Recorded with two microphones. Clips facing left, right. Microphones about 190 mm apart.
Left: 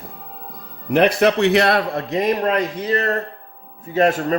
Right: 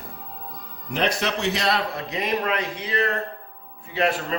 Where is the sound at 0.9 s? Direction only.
60° left (ahead or behind).